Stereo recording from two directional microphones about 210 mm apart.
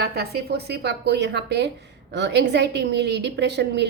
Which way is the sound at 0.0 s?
50° right (ahead or behind).